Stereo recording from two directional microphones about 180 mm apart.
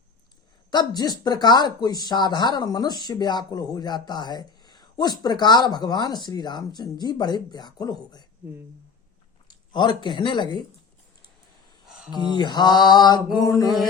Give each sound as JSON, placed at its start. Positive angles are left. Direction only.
{"t": 0.7, "sound": "speech", "side_deg": 25}
{"t": 9.5, "sound": "speech", "side_deg": 25}
{"t": 11.9, "sound": "a sound", "side_deg": -5}
{"t": 12.3, "sound": "speech", "side_deg": 25}